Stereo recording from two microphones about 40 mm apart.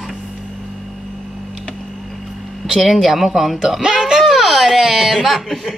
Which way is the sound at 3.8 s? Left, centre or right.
Centre.